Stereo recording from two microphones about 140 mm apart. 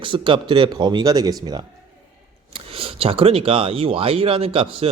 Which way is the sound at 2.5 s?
40° right (ahead or behind).